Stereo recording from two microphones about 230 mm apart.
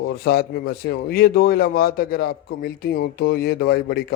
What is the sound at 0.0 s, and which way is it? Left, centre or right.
Speech, left.